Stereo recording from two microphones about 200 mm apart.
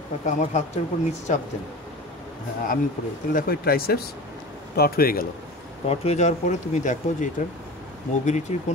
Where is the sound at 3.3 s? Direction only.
45° left (ahead or behind).